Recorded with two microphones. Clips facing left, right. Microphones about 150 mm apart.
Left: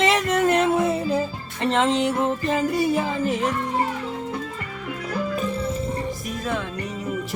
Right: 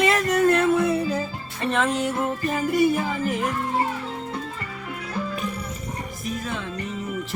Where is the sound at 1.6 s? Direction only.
20° left (ahead or behind).